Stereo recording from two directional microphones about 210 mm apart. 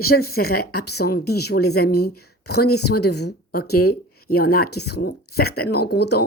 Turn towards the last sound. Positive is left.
turn(degrees=50)  # may be behind; listen again after turning